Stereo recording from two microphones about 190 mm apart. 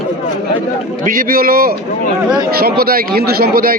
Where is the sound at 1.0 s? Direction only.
45° right (ahead or behind).